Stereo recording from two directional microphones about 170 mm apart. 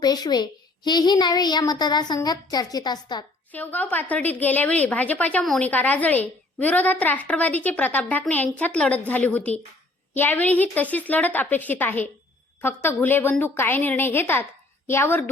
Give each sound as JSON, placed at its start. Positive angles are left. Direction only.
{"t": 0.0, "sound": "a woman's voice", "side_deg": 25}
{"t": 3.5, "sound": "a woman's voice", "side_deg": 10}